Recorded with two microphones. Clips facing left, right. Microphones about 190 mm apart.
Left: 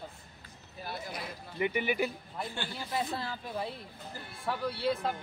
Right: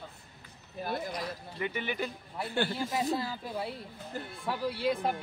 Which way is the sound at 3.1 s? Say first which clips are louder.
Right 3 dB; 10° right (ahead or behind).